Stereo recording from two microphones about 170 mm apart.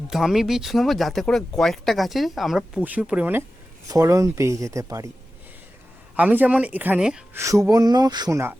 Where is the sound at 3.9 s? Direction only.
20° right (ahead or behind).